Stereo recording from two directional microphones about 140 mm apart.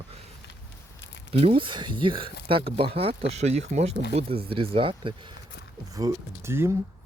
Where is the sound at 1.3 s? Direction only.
40° right (ahead or behind).